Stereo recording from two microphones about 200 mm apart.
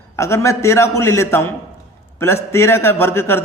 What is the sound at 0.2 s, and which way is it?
A man's voice, 15° left (ahead or behind).